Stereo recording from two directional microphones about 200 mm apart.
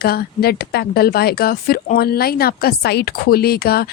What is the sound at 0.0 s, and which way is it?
Speech, 50° left (ahead or behind).